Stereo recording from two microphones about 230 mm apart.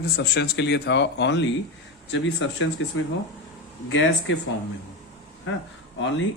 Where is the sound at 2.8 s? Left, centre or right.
Left.